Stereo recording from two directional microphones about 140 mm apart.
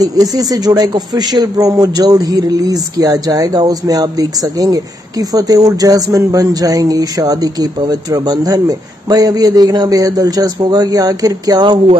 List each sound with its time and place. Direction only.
0.0 s speech: 25° right (ahead or behind)